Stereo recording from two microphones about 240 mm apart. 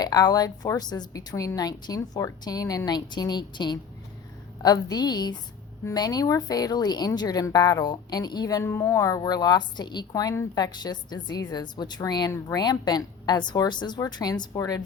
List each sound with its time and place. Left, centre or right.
0.0 s a woman's voice: centre